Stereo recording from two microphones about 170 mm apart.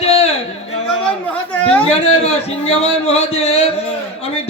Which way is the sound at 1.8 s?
35° left (ahead or behind).